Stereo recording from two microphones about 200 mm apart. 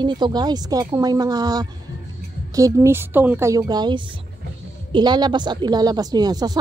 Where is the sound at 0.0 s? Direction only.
20° right (ahead or behind).